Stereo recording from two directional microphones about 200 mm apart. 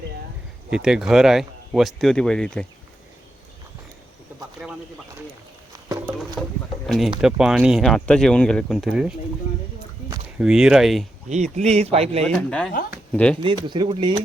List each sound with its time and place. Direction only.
0.7 s speech: 5° right (ahead or behind)
4.6 s speech: centre (ahead or behind)
6.4 s speech: 10° left (ahead or behind)
10.3 s speech: 5° right (ahead or behind)
11.5 s speech: 35° right (ahead or behind)
12.2 s speech: 5° left (ahead or behind)
13.4 s speech: 25° right (ahead or behind)